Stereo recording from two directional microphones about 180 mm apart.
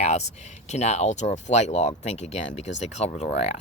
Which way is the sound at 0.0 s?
40° left (ahead or behind).